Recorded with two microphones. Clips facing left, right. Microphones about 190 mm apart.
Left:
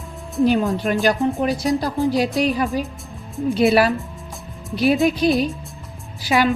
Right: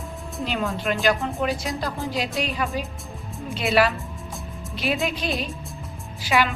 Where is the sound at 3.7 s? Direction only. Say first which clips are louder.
Left 3 dB; 35° left (ahead or behind).